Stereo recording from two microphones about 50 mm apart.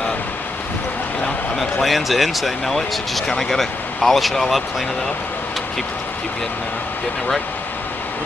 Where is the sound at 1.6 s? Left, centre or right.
Centre.